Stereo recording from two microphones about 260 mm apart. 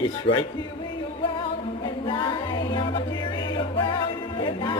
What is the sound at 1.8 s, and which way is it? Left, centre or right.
Music, centre.